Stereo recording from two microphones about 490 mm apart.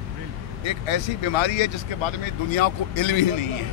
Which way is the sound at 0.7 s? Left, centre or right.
Left.